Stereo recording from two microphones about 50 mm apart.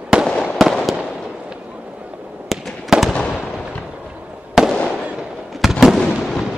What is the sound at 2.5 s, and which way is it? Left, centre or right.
Fireworks, centre.